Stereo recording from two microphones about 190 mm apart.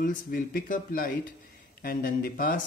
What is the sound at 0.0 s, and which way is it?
Speech, 45° left (ahead or behind).